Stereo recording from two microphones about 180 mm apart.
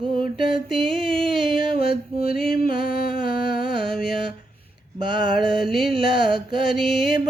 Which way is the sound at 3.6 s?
30° right (ahead or behind).